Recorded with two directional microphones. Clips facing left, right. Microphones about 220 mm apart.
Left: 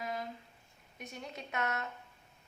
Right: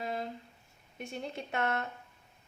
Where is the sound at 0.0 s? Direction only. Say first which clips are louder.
Right 3 dB; 30° right (ahead or behind).